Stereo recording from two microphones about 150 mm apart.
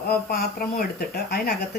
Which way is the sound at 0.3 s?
85° left.